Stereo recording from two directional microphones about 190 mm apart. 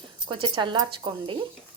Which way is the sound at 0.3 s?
25° right (ahead or behind).